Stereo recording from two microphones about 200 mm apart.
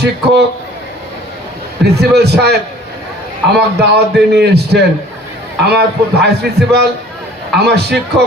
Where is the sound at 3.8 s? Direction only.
55° right (ahead or behind).